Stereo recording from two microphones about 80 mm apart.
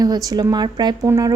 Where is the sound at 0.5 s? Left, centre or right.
Right.